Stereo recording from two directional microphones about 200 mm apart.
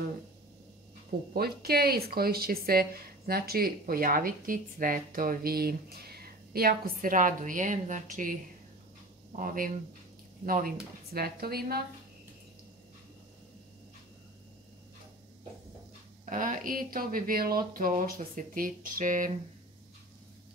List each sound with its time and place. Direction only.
1.3 s speech: 50° right (ahead or behind)
16.3 s speech: 40° right (ahead or behind)